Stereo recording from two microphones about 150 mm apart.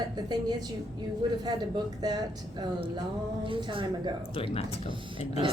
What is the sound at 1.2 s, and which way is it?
A woman's voice, 30° right (ahead or behind).